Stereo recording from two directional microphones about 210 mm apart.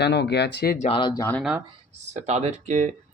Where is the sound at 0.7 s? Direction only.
30° left (ahead or behind).